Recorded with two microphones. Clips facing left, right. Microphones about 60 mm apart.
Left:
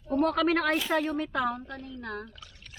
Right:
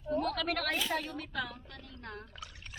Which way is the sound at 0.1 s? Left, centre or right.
Left.